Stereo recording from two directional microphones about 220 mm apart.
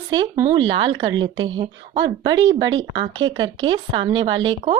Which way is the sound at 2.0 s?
15° right (ahead or behind).